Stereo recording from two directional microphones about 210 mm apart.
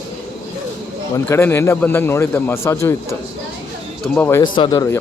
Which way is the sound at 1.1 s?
10° left (ahead or behind).